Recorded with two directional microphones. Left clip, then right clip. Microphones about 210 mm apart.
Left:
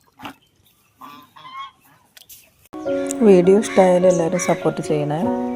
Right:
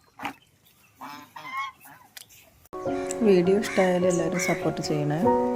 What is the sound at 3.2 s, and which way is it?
Speech, 5° left (ahead or behind).